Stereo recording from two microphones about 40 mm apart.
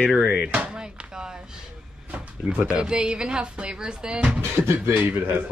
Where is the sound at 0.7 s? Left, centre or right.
Right.